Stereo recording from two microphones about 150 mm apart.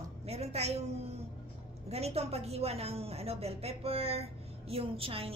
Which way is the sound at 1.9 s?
45° right (ahead or behind).